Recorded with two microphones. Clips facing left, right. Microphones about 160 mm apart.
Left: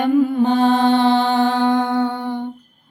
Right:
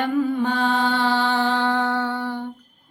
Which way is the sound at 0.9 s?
25° left (ahead or behind).